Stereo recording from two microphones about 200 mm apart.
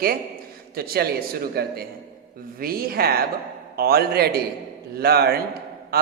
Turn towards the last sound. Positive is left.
turn(degrees=-50)  # may be behind; listen again after turning